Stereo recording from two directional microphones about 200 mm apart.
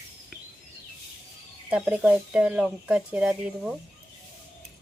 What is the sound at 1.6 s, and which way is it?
Speech, 10° right (ahead or behind).